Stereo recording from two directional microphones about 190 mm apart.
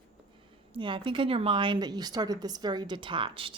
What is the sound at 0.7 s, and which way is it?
A woman's voice, 25° right (ahead or behind).